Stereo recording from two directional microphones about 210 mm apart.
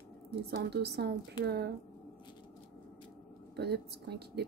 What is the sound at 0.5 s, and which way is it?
A woman's voice, 50° right (ahead or behind).